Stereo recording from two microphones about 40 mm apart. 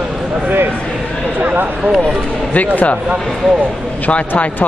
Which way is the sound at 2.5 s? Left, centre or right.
Left.